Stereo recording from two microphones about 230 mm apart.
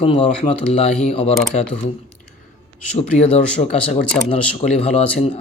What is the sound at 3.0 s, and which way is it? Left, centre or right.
Speech, left.